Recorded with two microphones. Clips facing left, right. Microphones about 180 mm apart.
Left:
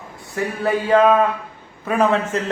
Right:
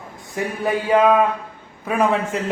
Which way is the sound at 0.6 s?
10° right (ahead or behind).